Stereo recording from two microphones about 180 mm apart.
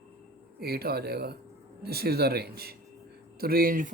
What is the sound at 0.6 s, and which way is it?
Speech, 60° right (ahead or behind).